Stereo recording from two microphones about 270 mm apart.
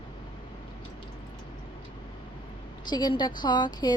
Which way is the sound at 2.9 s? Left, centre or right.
Centre.